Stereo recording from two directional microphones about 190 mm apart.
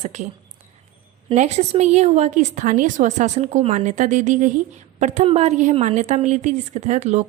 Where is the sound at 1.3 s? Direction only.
35° right (ahead or behind).